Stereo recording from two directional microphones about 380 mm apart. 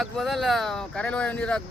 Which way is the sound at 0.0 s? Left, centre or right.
Centre.